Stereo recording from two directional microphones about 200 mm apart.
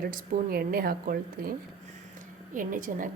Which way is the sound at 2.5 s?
45° right (ahead or behind).